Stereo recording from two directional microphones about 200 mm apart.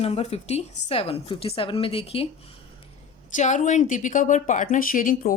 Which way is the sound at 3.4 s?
35° left (ahead or behind).